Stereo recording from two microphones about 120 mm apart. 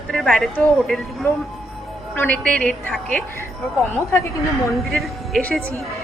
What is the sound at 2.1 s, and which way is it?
Speech, 10° left (ahead or behind).